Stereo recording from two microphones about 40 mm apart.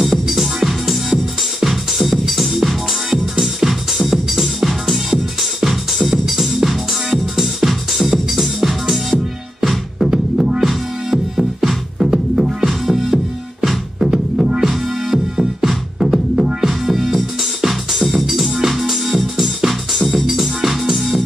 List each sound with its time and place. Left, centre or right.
0.0 s music: centre
9.9 s music: centre
12.8 s music: centre